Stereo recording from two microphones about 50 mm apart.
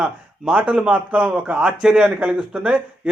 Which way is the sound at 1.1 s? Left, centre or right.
Right.